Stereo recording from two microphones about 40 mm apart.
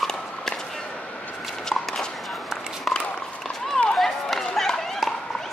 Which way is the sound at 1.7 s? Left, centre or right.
Centre.